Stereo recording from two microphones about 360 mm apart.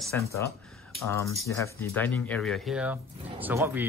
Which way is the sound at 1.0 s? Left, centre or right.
Centre.